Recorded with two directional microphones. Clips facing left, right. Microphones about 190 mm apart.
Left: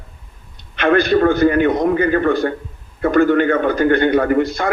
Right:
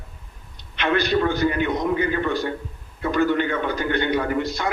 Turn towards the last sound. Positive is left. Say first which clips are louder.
# left 7 dB
turn(degrees=50)  # may be behind; listen again after turning